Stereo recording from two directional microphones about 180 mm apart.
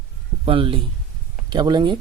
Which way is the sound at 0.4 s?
30° right (ahead or behind).